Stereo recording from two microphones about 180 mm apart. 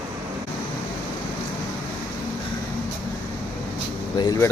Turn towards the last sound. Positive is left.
turn(degrees=20)  # may be behind; listen again after turning